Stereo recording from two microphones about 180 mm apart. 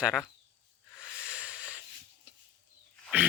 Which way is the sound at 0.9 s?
5° right (ahead or behind).